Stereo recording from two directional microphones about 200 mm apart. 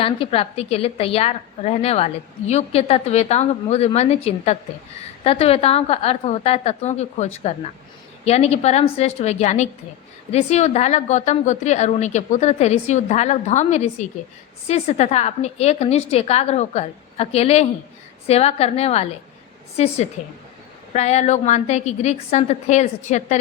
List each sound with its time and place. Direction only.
0.0 s a woman's voice: 30° left (ahead or behind)